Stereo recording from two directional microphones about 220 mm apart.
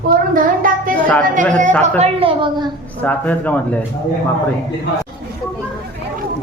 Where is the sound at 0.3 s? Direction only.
40° right (ahead or behind).